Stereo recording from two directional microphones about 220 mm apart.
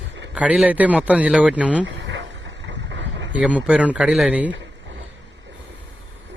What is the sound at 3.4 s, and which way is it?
A man's voice, 5° right (ahead or behind).